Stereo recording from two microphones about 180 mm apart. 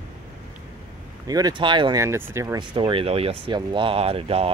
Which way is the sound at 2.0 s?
15° right (ahead or behind).